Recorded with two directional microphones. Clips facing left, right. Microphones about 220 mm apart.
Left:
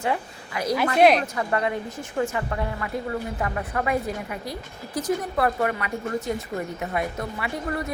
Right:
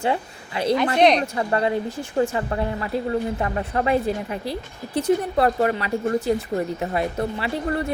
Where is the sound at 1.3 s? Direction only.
30° right (ahead or behind).